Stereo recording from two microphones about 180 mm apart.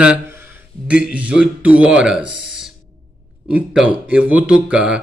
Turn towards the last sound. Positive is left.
turn(degrees=-5)  # may be behind; listen again after turning